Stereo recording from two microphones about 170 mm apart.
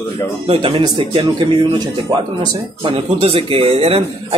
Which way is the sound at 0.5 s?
30° right (ahead or behind).